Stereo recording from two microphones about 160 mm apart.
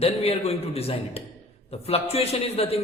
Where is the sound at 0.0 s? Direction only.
40° left (ahead or behind).